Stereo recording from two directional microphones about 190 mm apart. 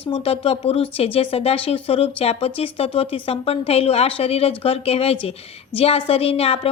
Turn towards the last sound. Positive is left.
turn(degrees=30)  # may be behind; listen again after turning